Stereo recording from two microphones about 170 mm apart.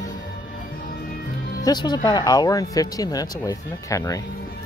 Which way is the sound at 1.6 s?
25° left (ahead or behind).